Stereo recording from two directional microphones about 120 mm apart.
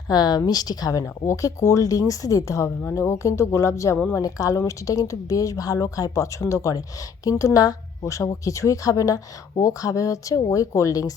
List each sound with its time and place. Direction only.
0.1 s speech: 35° left (ahead or behind)